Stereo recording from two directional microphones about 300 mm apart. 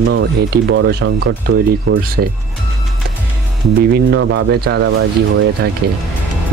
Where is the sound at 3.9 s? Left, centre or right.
Right.